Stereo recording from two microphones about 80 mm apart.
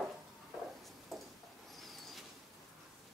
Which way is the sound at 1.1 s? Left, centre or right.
Centre.